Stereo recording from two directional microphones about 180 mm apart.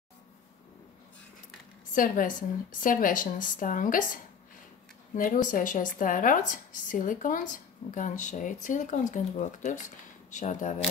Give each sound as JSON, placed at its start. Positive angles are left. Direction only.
{"t": 2.0, "sound": "speech", "side_deg": 50}